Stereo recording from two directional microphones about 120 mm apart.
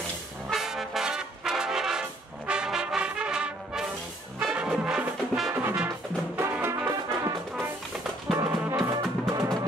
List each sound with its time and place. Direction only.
0.5 s brass instrument: centre (ahead or behind)
4.4 s music: 5° right (ahead or behind)
5.5 s music: 15° right (ahead or behind)
8.4 s music: 25° right (ahead or behind)